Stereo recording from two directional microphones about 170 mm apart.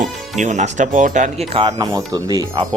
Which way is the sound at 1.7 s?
20° right (ahead or behind).